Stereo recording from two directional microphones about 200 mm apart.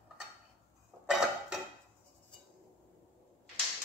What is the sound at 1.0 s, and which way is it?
Dishes, 5° right (ahead or behind).